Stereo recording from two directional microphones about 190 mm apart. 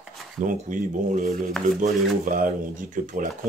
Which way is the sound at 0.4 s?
45° right (ahead or behind).